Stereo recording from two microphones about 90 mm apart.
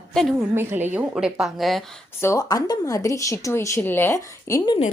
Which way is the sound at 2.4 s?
45° left (ahead or behind).